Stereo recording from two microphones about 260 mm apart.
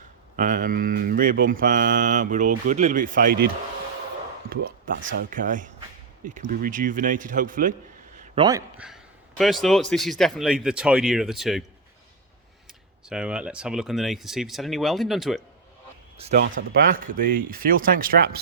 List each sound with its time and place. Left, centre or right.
0.3 s mantra: right
4.9 s speech: right
5.3 s mantra: right
8.4 s a man's voice: centre
9.4 s speech: centre
13.1 s speech: centre
16.1 s speech: right
16.4 s mantra: right